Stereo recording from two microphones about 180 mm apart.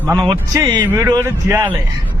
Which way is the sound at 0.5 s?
20° right (ahead or behind).